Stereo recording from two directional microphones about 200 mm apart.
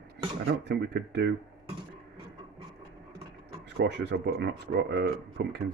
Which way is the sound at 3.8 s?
55° right (ahead or behind).